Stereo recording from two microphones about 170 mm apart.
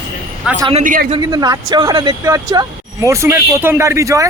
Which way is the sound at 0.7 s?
50° right (ahead or behind).